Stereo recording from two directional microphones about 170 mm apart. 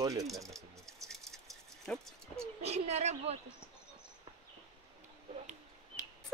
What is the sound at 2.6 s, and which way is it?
Speech, 40° right (ahead or behind).